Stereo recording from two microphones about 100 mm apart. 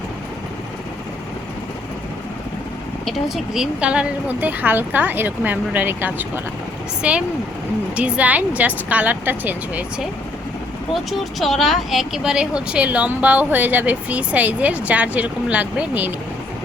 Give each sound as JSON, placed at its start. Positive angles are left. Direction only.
{"t": 3.1, "sound": "speech", "side_deg": -5}
{"t": 10.9, "sound": "speech", "side_deg": 0}